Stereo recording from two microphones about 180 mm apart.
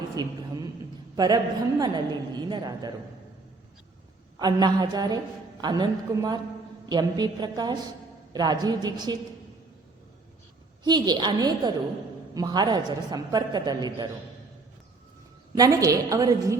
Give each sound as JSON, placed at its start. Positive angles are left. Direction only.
{"t": 0.2, "sound": "a sound", "side_deg": -20}
{"t": 1.1, "sound": "a man's voice", "side_deg": -20}
{"t": 4.4, "sound": "a woman's voice", "side_deg": -20}
{"t": 10.8, "sound": "a woman's voice", "side_deg": -25}
{"t": 15.5, "sound": "a woman's voice", "side_deg": -20}